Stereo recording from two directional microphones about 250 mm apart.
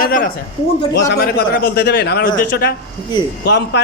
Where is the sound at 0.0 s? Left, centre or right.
Left.